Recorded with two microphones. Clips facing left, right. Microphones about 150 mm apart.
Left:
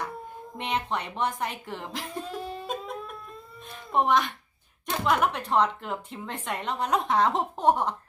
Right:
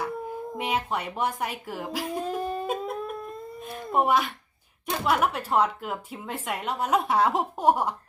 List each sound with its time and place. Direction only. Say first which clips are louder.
0.5 s speech: even; 5° right (ahead or behind)
2.2 s a sound: right 6 dB; 45° right (ahead or behind)
2.6 s wind instrument: right 5 dB; 5° right (ahead or behind)
3.9 s speech: even; 5° right (ahead or behind)